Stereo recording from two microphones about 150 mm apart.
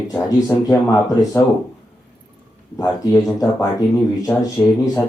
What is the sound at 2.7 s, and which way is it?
Speech, 15° left (ahead or behind).